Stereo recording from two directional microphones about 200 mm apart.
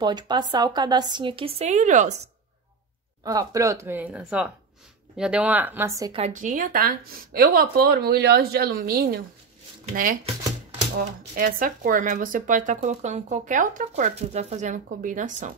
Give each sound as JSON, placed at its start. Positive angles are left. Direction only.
{"t": 0.0, "sound": "a woman's voice", "side_deg": -20}
{"t": 3.3, "sound": "speech", "side_deg": -15}
{"t": 6.1, "sound": "speech", "side_deg": -35}
{"t": 11.0, "sound": "speech", "side_deg": -45}